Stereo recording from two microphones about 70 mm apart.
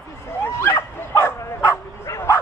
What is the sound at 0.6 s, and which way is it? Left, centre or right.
Bow-wow, left.